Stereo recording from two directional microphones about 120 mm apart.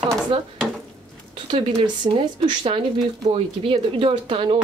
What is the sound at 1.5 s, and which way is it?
Speech, 50° right (ahead or behind).